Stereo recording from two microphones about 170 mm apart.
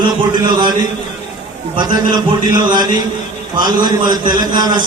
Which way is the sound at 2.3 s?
25° right (ahead or behind).